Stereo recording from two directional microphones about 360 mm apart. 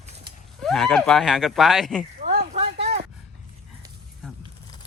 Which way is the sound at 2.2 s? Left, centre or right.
Centre.